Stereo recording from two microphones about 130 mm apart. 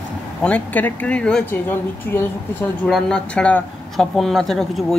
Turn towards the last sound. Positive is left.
turn(degrees=5)  # may be behind; listen again after turning